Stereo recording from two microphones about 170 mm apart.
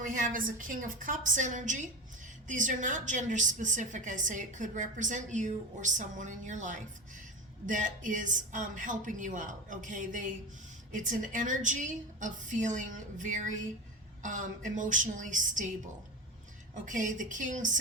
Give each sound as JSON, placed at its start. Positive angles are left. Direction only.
{"t": 0.0, "sound": "a woman's voice", "side_deg": -50}
{"t": 16.7, "sound": "a woman's voice", "side_deg": -50}